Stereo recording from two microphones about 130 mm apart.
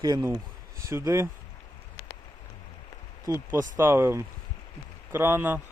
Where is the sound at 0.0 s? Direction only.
25° right (ahead or behind).